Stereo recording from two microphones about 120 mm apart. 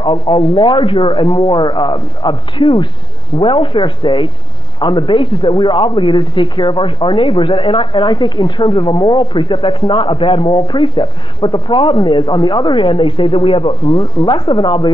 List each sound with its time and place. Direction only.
0.4 s a man's voice: 45° left (ahead or behind)